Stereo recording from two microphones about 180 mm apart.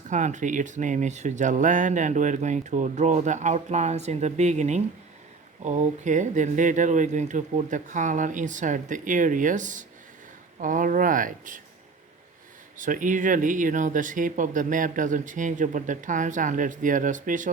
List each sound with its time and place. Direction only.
0.1 s speech: 45° right (ahead or behind)
12.7 s speech: 45° right (ahead or behind)